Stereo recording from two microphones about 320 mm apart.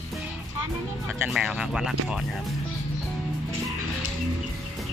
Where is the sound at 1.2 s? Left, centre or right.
Centre.